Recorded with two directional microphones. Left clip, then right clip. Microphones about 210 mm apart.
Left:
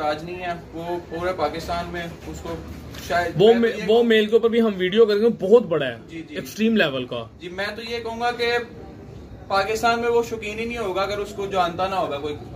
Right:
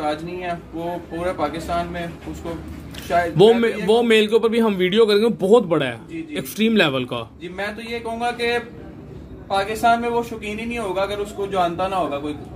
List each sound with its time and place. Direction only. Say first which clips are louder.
0.0 s speech: right 1 dB; 15° left (ahead or behind)
3.3 s a man's voice: right 1 dB; 30° right (ahead or behind)
7.5 s speech: even; 15° left (ahead or behind)